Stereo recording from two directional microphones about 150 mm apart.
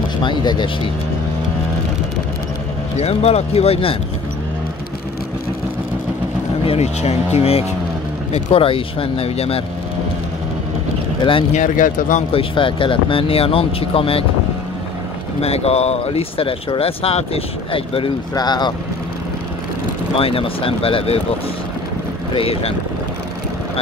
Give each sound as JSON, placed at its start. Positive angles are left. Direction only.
{"t": 0.2, "sound": "speech", "side_deg": 30}
{"t": 3.0, "sound": "speech", "side_deg": 45}
{"t": 6.6, "sound": "speech", "side_deg": 45}
{"t": 11.5, "sound": "speech", "side_deg": 60}
{"t": 12.3, "sound": "speech", "side_deg": 35}
{"t": 15.4, "sound": "speech", "side_deg": 45}
{"t": 20.2, "sound": "speech", "side_deg": 40}
{"t": 22.3, "sound": "speech", "side_deg": 40}